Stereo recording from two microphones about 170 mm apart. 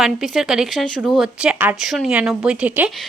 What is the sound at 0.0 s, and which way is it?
Speech, centre (ahead or behind).